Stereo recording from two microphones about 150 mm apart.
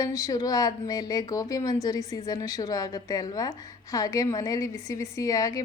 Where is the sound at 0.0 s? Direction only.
20° left (ahead or behind).